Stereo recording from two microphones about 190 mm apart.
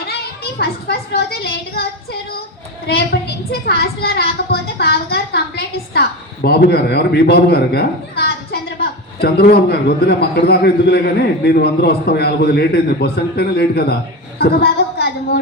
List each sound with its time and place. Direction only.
0.6 s a woman's voice: 55° left (ahead or behind)
2.8 s a woman's voice: 60° left (ahead or behind)
14.3 s a sound: 55° left (ahead or behind)